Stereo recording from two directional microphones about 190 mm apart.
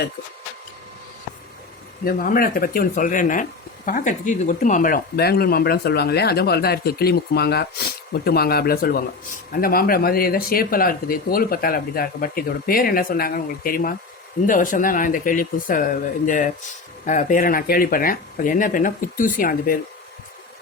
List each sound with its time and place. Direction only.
2.0 s speech: 50° left (ahead or behind)